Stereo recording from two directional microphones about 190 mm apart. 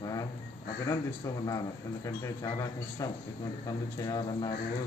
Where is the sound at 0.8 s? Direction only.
20° left (ahead or behind).